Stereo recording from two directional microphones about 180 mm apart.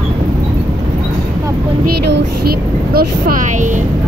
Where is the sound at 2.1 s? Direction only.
60° right (ahead or behind).